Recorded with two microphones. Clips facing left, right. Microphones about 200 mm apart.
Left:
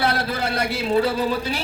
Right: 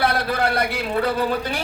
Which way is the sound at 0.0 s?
55° right (ahead or behind).